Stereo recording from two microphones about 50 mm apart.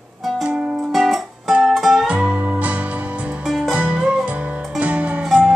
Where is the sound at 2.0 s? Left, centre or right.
Right.